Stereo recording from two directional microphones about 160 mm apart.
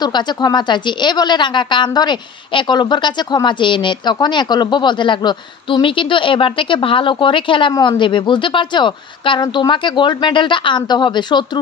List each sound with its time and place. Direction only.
0.0 s a woman's voice: 25° left (ahead or behind)